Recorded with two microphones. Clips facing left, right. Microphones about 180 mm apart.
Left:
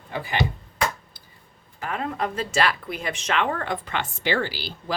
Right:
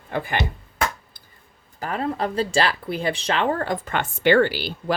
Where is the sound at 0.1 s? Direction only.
55° right (ahead or behind).